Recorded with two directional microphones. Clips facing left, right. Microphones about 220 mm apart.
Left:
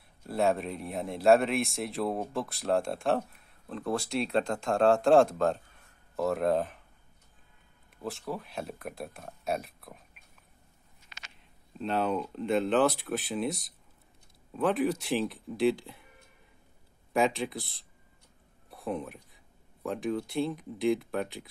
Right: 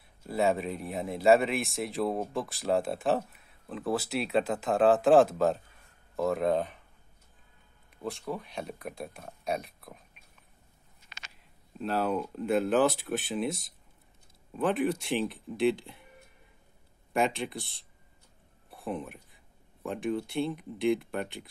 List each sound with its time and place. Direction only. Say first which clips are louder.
0.2 s speech: even; centre (ahead or behind)
8.0 s speech: right 1 dB; centre (ahead or behind)
11.8 s speech: even; 5° right (ahead or behind)
17.1 s speech: left 1 dB; centre (ahead or behind)